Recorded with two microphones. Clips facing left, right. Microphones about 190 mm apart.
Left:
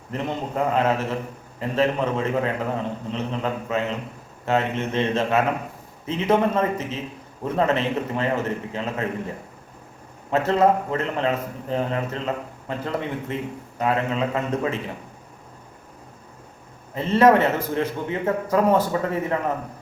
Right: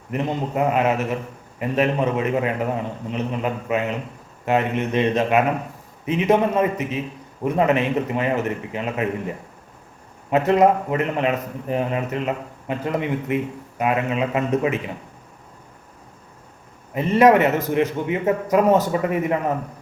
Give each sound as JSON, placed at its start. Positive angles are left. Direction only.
{"t": 0.1, "sound": "a man's voice", "side_deg": -15}
{"t": 10.3, "sound": "a man's voice", "side_deg": -15}
{"t": 16.9, "sound": "a man's voice", "side_deg": -15}